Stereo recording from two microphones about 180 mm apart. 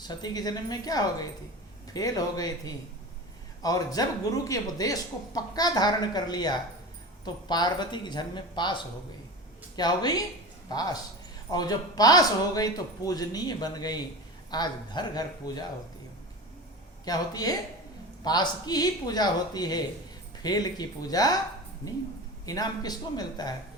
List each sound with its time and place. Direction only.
0.0 s speech: 25° left (ahead or behind)
17.1 s speech: 20° left (ahead or behind)
22.4 s speech: 20° left (ahead or behind)